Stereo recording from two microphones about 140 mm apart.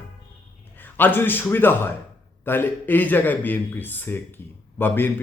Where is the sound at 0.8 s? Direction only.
15° left (ahead or behind).